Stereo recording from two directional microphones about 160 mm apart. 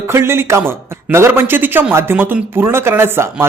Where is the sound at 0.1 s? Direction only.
15° right (ahead or behind).